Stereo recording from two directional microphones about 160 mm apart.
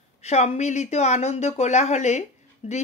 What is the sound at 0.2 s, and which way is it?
Speech, 45° left (ahead or behind).